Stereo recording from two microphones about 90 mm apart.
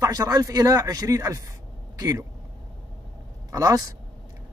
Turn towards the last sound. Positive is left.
turn(degrees=-45)  # may be behind; listen again after turning